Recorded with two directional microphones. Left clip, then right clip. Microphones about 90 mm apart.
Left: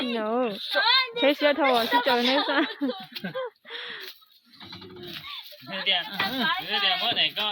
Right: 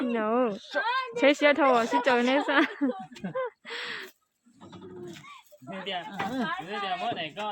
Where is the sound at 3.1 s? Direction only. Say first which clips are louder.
Left 5 dB; 10° left (ahead or behind).